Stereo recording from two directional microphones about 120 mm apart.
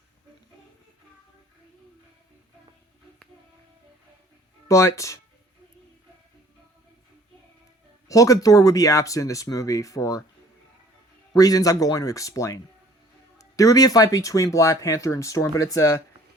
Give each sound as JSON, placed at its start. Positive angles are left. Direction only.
{"t": 4.7, "sound": "speech", "side_deg": 25}
{"t": 8.0, "sound": "speech", "side_deg": 25}
{"t": 11.3, "sound": "speech", "side_deg": 30}